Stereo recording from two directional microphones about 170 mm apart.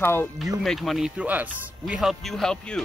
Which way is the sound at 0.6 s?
Centre (ahead or behind).